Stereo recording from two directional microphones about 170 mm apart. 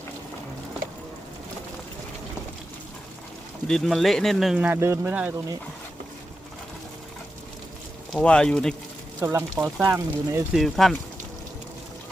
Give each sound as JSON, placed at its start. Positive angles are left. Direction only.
{"t": 3.7, "sound": "speech", "side_deg": 0}
{"t": 8.1, "sound": "speech", "side_deg": 5}
{"t": 9.2, "sound": "speech", "side_deg": -15}
{"t": 10.5, "sound": "speech", "side_deg": 0}